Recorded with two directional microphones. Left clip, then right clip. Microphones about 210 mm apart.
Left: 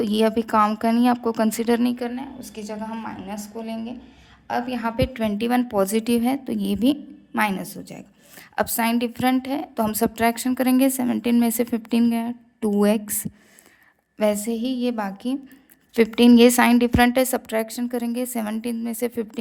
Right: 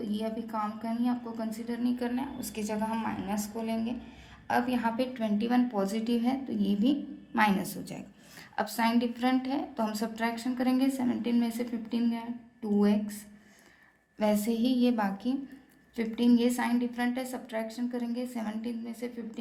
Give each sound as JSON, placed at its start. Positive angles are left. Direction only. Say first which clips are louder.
{"t": 0.0, "sound": "a woman's voice", "louder": "left 14 dB", "side_deg": 55}
{"t": 2.0, "sound": "a woman's voice", "louder": "left 3 dB", "side_deg": 20}
{"t": 7.3, "sound": "a woman's voice", "louder": "left 4 dB", "side_deg": 35}
{"t": 8.5, "sound": "a woman's voice", "louder": "left 6 dB", "side_deg": 45}
{"t": 14.2, "sound": "a sound", "louder": "left 7 dB", "side_deg": 35}
{"t": 16.0, "sound": "a woman's voice", "louder": "left 13 dB", "side_deg": 45}